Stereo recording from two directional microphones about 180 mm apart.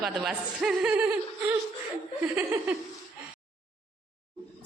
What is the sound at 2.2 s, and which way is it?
Laughter, 10° right (ahead or behind).